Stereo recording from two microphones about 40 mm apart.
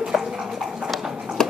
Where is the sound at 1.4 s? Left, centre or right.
Centre.